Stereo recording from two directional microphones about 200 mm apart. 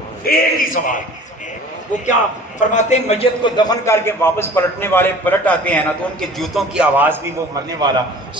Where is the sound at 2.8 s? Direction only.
35° left (ahead or behind); by 7.1 s 5° right (ahead or behind).